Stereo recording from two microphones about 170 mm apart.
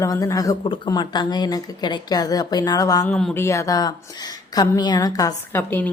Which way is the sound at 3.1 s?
5° left (ahead or behind).